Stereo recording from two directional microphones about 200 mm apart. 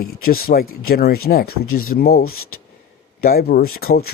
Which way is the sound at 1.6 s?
90° left.